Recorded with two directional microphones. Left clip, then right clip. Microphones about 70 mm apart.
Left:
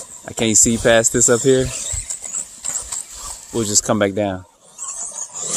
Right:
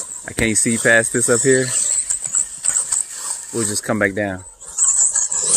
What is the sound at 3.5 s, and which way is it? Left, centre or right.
Speech, left.